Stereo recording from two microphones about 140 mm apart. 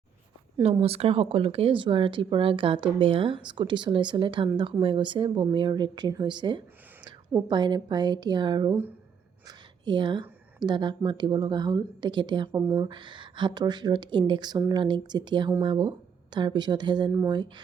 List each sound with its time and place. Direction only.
0.6 s speech: 45° right (ahead or behind)